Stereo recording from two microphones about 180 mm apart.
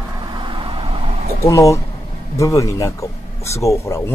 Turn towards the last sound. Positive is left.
turn(degrees=15)  # may be behind; listen again after turning